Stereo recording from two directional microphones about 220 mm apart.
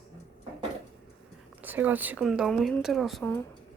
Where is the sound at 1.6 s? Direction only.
10° right (ahead or behind).